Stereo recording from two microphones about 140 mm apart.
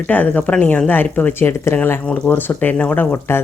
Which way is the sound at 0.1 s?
10° left (ahead or behind).